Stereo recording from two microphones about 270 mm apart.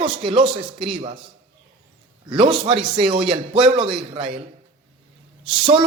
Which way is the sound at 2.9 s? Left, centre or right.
Centre.